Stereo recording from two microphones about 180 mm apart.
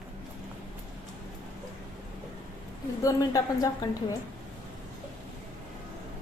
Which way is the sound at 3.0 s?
20° left (ahead or behind).